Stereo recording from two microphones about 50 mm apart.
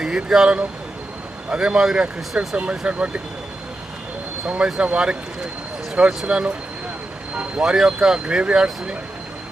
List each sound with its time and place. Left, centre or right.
0.0 s speech: centre
2.6 s speech: right
4.4 s speech: right